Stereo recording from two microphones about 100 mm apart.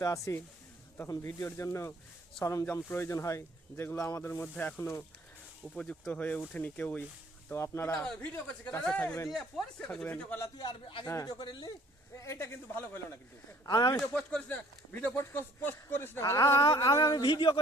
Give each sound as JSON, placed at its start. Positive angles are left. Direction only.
{"t": 0.0, "sound": "speech", "side_deg": 35}
{"t": 1.5, "sound": "speech", "side_deg": 25}
{"t": 5.7, "sound": "speech", "side_deg": 10}
{"t": 7.5, "sound": "speech", "side_deg": 30}
{"t": 7.9, "sound": "speech", "side_deg": 5}
{"t": 10.6, "sound": "speech", "side_deg": 50}
{"t": 11.0, "sound": "speech", "side_deg": 30}
{"t": 11.3, "sound": "speech", "side_deg": 45}
{"t": 12.1, "sound": "speech", "side_deg": 25}
{"t": 13.7, "sound": "speech", "side_deg": 45}
{"t": 14.1, "sound": "speech", "side_deg": 10}
{"t": 15.1, "sound": "speech", "side_deg": 25}
{"t": 17.2, "sound": "speech", "side_deg": 55}